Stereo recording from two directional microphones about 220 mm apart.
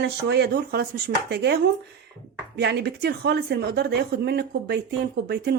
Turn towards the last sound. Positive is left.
turn(degrees=-45)  # may be behind; listen again after turning